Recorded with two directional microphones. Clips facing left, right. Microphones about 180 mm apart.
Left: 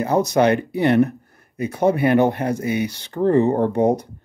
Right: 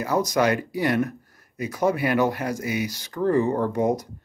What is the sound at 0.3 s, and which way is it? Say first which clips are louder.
Speech: left 5 dB; 25° left (ahead or behind).